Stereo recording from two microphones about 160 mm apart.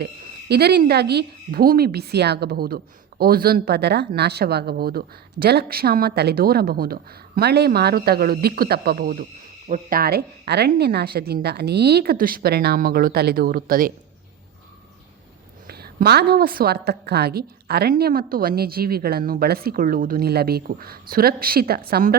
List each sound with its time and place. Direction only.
0.0 s speech: 90° right; by 9.2 s 65° right (ahead or behind)
9.6 s speech: 50° right (ahead or behind)
10.0 s speech: 80° right
15.6 s speech: 75° right (ahead or behind)